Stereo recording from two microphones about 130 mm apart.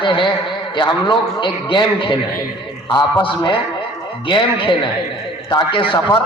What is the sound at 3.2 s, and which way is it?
A man's voice, 40° left (ahead or behind).